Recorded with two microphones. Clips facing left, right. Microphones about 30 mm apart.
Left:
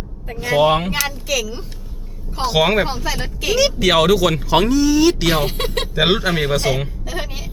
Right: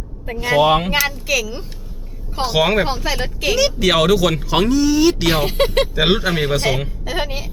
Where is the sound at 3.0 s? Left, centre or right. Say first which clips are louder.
Right 2 dB; centre.